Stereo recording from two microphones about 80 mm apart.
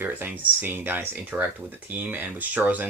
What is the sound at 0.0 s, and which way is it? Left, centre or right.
Speech, right.